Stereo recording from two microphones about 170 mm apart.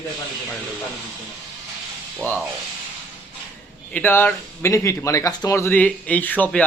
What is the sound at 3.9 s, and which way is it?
Speech, 10° left (ahead or behind).